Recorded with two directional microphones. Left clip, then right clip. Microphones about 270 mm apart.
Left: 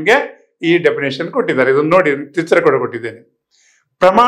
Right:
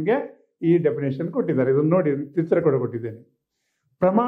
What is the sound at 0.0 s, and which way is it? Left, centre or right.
A man's voice, centre.